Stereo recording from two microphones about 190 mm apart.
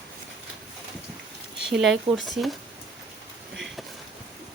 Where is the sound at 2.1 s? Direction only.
30° right (ahead or behind).